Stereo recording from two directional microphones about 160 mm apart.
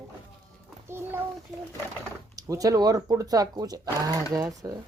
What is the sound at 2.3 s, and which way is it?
Speech, 20° right (ahead or behind).